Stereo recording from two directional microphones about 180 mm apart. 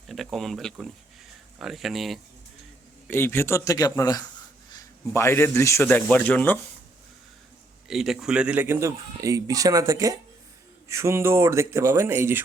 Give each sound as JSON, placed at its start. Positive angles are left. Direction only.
{"t": 0.1, "sound": "speech", "side_deg": 0}
{"t": 3.1, "sound": "speech", "side_deg": 15}
{"t": 7.9, "sound": "a man's voice", "side_deg": 0}